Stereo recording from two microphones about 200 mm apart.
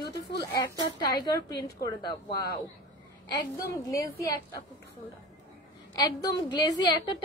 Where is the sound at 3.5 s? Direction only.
15° left (ahead or behind).